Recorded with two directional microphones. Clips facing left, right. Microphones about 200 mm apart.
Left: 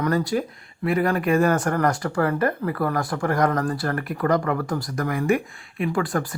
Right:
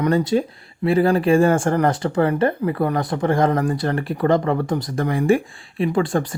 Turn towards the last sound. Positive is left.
turn(degrees=-25)  # may be behind; listen again after turning